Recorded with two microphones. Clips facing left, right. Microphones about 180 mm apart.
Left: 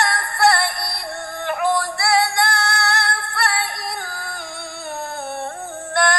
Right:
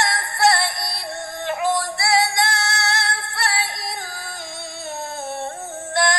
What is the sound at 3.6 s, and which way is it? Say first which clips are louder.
Music: left 2 dB; 20° right (ahead or behind).